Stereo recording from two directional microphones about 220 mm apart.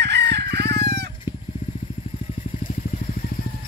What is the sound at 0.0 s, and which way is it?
Chicken, 50° right (ahead or behind).